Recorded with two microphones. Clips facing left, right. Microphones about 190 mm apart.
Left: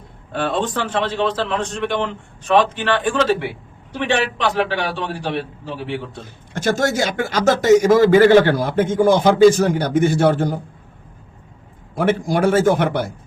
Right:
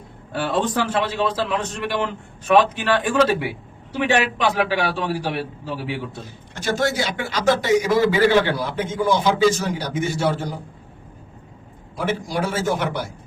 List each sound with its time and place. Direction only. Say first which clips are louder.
0.3 s a man's voice: even; 10° right (ahead or behind)
6.2 s a man's voice: left 7 dB; 50° left (ahead or behind)
11.9 s a man's voice: left 6 dB; 55° left (ahead or behind)